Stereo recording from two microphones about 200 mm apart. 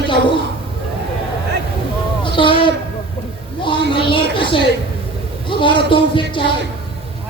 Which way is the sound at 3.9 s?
25° left (ahead or behind).